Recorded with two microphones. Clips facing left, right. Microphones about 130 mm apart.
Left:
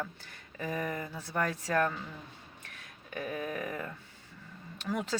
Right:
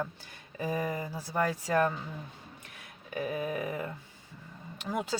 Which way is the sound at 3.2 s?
15° right (ahead or behind).